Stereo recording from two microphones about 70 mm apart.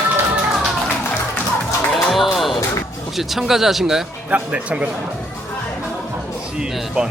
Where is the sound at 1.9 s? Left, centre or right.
Centre.